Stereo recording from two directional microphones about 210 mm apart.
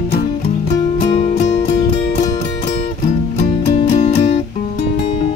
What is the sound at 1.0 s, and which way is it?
Music, 30° left (ahead or behind).